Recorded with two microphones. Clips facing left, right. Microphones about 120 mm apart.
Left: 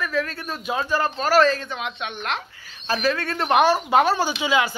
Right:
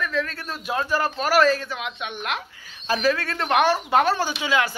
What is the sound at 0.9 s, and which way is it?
A man's voice, 10° right (ahead or behind).